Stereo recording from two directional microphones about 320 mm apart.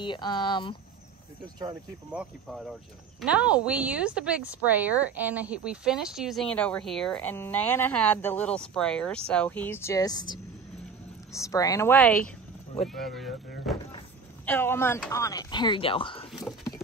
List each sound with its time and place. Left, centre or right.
0.0 s speech: centre
1.6 s speech: centre
2.5 s speech: centre
11.3 s speech: centre